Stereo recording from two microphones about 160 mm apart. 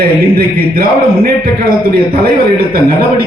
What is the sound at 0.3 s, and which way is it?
A man's voice, 70° right (ahead or behind).